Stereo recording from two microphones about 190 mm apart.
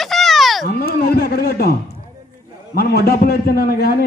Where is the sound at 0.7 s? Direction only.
55° left (ahead or behind).